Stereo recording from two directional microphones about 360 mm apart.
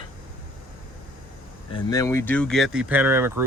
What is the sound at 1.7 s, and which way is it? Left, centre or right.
Speech, centre.